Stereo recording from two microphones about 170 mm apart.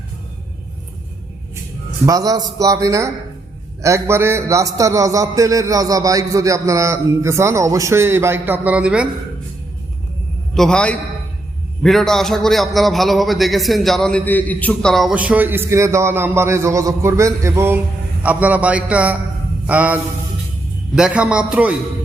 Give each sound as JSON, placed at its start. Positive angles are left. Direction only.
{"t": 2.0, "sound": "a man's voice", "side_deg": -20}
{"t": 10.5, "sound": "a man's voice", "side_deg": 5}